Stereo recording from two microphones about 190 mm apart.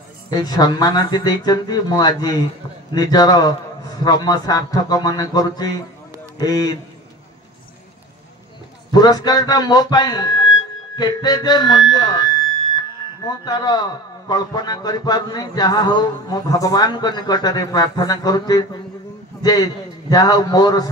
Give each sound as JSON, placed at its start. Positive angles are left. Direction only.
{"t": 0.3, "sound": "a man's voice", "side_deg": 20}
{"t": 8.9, "sound": "a man's voice", "side_deg": 20}